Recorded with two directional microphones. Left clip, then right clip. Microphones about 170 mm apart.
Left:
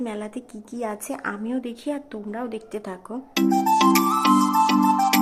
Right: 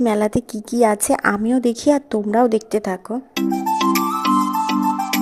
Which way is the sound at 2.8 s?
30° right (ahead or behind).